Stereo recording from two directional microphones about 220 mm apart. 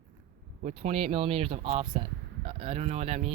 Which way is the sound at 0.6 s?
30° right (ahead or behind).